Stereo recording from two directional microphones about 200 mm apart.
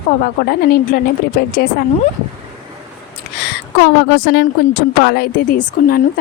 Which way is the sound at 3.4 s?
55° left (ahead or behind).